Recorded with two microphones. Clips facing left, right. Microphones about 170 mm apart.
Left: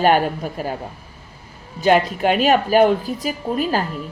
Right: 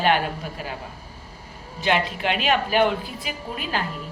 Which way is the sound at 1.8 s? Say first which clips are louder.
Left 7 dB; 45° left (ahead or behind).